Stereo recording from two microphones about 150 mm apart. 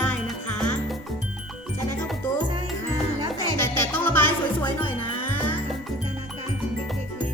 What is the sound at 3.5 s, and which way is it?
Music, 15° left (ahead or behind).